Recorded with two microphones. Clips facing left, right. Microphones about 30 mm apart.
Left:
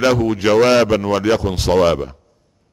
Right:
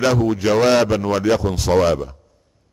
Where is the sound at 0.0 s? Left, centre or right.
Centre.